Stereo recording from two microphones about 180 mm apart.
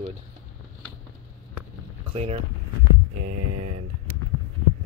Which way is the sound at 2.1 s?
35° right (ahead or behind).